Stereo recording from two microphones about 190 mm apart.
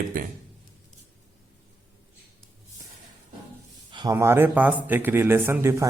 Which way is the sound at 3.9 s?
25° right (ahead or behind).